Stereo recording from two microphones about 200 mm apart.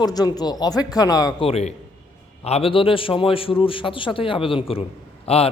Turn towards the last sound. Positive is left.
turn(degrees=30)  # may be behind; listen again after turning